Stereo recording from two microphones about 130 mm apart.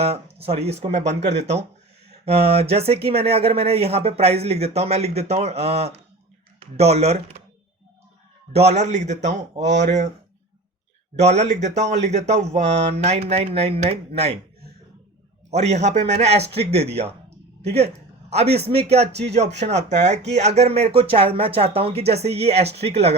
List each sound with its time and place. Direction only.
0.0 s a man's voice: 50° right (ahead or behind)
8.5 s speech: 55° right (ahead or behind)
11.2 s speech: 60° right (ahead or behind)
15.4 s a man's voice: 60° right (ahead or behind)